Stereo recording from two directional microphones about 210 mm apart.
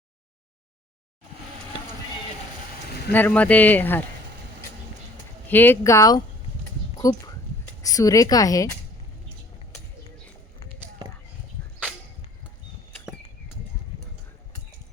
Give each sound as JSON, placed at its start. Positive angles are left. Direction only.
{"t": 3.1, "sound": "speech", "side_deg": 10}
{"t": 5.5, "sound": "speech", "side_deg": 10}
{"t": 6.9, "sound": "a sound", "side_deg": 15}
{"t": 7.8, "sound": "speech", "side_deg": 15}